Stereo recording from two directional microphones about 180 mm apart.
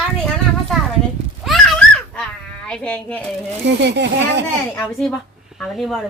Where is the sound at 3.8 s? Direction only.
75° right (ahead or behind).